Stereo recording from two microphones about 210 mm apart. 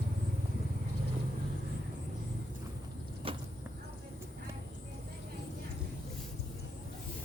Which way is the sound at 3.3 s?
25° right (ahead or behind).